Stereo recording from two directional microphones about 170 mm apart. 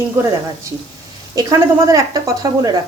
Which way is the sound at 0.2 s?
15° right (ahead or behind).